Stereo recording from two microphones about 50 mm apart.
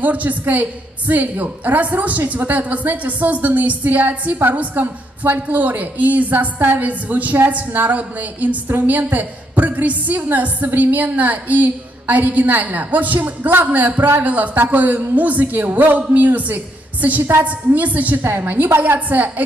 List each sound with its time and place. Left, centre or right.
0.0 s a woman's voice: right
18.2 s a woman's voice: right